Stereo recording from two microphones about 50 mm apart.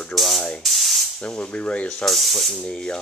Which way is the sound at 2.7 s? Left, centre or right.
Centre.